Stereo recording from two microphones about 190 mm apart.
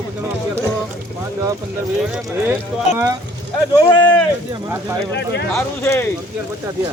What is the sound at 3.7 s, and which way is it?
Speech, 20° left (ahead or behind).